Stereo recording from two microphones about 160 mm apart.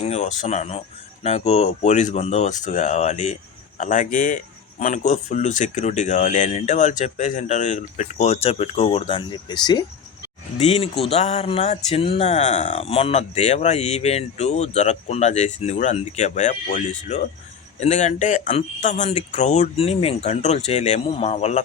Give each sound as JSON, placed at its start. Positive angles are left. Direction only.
{"t": 0.0, "sound": "speech", "side_deg": 40}
{"t": 10.6, "sound": "speech", "side_deg": 40}